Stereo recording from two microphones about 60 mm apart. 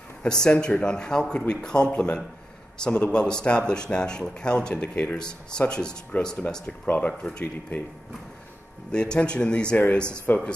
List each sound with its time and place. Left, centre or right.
0.2 s speech: centre
6.6 s speech: left
8.9 s speech: centre
10.2 s speech: left